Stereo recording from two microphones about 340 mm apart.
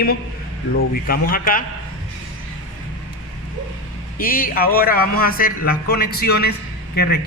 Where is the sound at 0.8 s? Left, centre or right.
Left.